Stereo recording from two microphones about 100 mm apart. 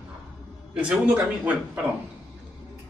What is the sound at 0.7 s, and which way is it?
Speech, 10° right (ahead or behind).